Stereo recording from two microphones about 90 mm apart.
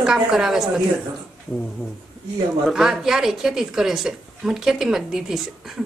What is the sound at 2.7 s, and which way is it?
A woman's voice, 5° right (ahead or behind).